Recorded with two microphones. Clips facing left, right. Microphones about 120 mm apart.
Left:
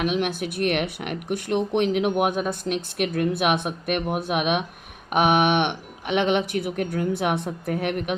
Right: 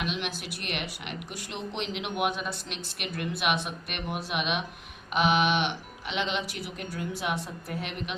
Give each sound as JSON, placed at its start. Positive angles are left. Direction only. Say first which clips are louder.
{"t": 0.0, "sound": "speech", "louder": "left 9 dB", "side_deg": 50}